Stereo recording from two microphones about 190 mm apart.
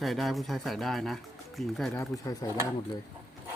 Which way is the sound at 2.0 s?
20° left (ahead or behind).